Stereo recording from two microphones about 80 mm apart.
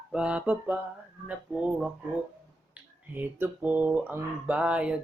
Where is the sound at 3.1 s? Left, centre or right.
Right.